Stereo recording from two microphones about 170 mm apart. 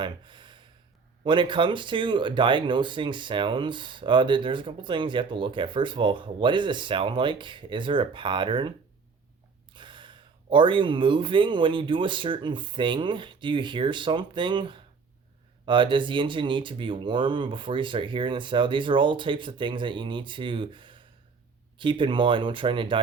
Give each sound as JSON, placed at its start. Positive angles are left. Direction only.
{"t": 0.0, "sound": "gasp", "side_deg": -30}
{"t": 1.2, "sound": "speech", "side_deg": -30}
{"t": 9.7, "sound": "speech", "side_deg": -30}